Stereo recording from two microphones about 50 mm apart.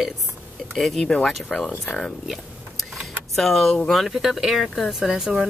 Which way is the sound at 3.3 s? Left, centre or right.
Centre.